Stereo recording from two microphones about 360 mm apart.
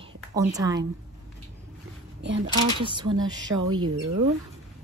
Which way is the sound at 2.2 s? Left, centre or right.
Right.